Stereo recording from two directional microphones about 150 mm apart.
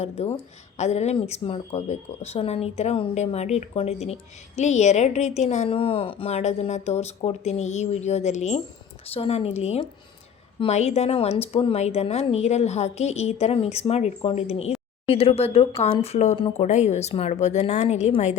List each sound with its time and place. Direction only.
0.2 s a woman's voice: 45° left (ahead or behind)